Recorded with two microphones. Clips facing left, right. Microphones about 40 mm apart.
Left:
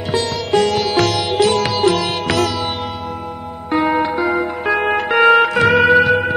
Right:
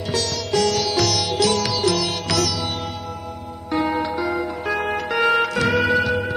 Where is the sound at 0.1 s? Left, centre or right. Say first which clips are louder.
Left 6 dB; left.